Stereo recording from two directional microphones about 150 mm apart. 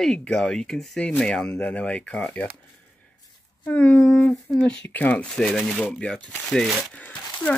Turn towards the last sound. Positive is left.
turn(degrees=10)  # may be behind; listen again after turning